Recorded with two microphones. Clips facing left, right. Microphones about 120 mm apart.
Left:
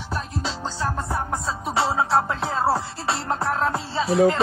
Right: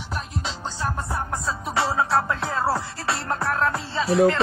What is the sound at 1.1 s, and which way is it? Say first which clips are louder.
Music: left 1 dB; 20° left (ahead or behind).